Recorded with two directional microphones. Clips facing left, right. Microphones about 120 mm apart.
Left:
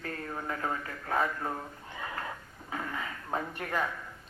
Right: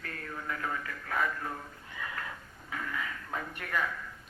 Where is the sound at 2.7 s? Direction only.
30° left (ahead or behind).